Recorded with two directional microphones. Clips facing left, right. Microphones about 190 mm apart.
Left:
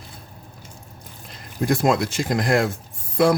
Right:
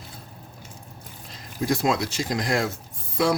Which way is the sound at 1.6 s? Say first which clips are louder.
Left 4 dB; 55° left (ahead or behind).